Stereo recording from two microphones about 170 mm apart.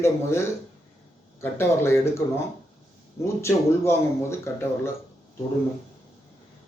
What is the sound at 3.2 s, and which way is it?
Speech, 15° left (ahead or behind).